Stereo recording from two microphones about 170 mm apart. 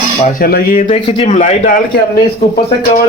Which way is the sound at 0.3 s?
60° left (ahead or behind).